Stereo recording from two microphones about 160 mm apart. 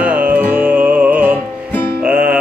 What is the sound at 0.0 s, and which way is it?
Music, 10° right (ahead or behind).